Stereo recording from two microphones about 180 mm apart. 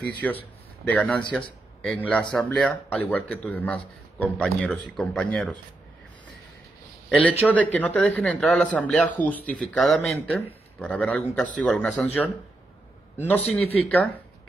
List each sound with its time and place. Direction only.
0.0 s speech: 10° left (ahead or behind)
7.1 s a man's voice: 10° left (ahead or behind)
13.8 s speech: centre (ahead or behind)